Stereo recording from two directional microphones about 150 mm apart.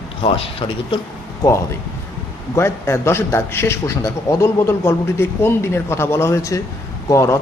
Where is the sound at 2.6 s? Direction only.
15° left (ahead or behind).